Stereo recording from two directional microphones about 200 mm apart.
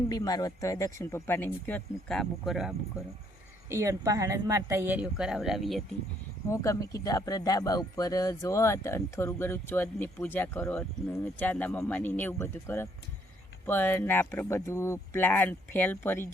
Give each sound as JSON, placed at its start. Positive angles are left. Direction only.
{"t": 0.1, "sound": "speech", "side_deg": 20}
{"t": 3.7, "sound": "speech", "side_deg": -15}
{"t": 6.5, "sound": "speech", "side_deg": 15}